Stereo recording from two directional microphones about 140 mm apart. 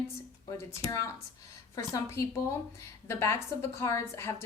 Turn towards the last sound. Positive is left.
turn(degrees=20)  # may be behind; listen again after turning